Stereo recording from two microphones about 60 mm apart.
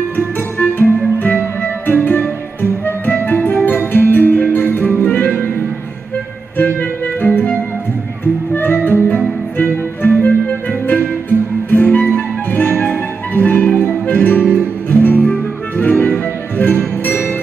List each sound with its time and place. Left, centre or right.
0.6 s music: left
3.3 s music: left
6.6 s music: left
8.5 s music: left